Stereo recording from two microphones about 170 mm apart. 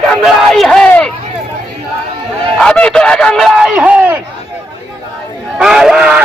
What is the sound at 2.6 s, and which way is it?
Speech, 5° left (ahead or behind).